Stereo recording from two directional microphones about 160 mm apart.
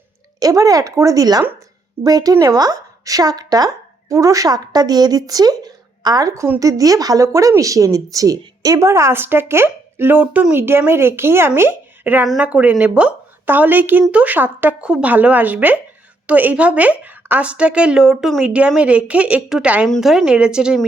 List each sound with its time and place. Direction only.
0.3 s a woman's voice: 20° right (ahead or behind); by 20.8 s 5° right (ahead or behind)